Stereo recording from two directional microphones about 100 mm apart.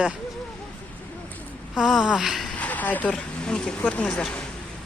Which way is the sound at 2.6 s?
15° left (ahead or behind).